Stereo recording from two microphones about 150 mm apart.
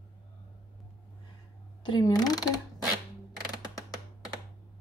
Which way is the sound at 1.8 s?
25° left (ahead or behind).